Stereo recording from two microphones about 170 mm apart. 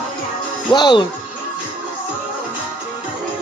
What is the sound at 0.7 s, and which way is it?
Speech, 25° left (ahead or behind).